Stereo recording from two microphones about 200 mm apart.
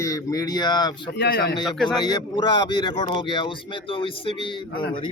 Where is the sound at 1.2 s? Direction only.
55° left (ahead or behind).